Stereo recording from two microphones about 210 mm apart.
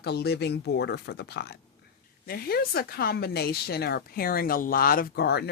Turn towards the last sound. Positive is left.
turn(degrees=50)  # may be behind; listen again after turning